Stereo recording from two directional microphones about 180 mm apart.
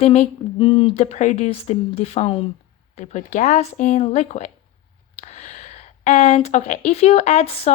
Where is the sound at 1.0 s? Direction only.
40° left (ahead or behind).